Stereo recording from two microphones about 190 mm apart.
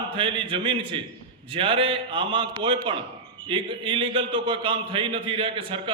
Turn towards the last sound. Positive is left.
turn(degrees=-25)  # may be behind; listen again after turning